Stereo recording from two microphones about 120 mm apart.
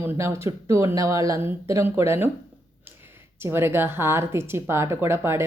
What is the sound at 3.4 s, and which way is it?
A woman's voice, 20° right (ahead or behind).